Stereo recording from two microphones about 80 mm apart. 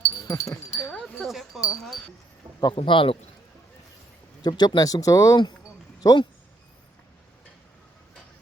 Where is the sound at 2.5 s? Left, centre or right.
Left.